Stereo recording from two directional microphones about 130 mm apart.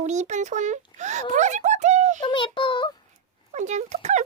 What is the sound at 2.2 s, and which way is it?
Synthetic singing, 35° left (ahead or behind).